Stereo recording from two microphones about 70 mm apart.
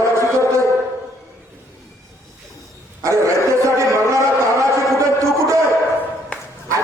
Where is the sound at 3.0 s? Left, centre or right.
Right.